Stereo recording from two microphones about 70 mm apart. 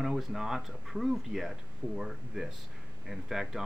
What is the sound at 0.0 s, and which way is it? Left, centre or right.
Speech, centre.